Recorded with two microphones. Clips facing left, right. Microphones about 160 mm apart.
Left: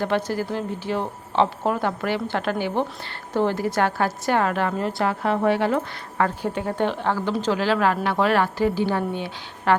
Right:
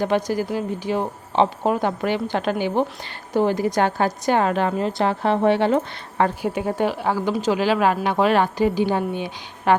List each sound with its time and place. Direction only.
0.0 s a woman's voice: 15° right (ahead or behind)
6.4 s speech: 15° right (ahead or behind)